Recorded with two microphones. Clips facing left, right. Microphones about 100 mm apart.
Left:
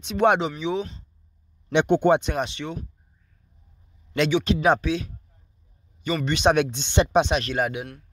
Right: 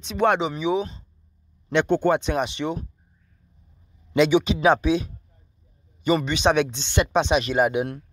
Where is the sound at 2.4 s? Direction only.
20° right (ahead or behind).